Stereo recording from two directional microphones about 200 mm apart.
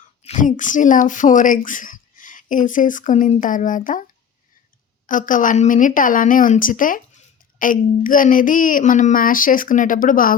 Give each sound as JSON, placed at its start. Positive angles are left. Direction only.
{"t": 0.2, "sound": "speech", "side_deg": 35}
{"t": 5.0, "sound": "speech", "side_deg": 40}